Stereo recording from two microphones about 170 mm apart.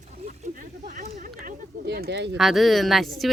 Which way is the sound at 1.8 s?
75° right (ahead or behind).